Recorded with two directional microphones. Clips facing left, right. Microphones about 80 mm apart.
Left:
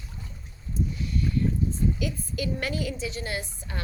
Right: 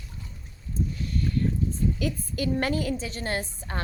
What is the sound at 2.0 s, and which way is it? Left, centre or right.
A woman's voice, right.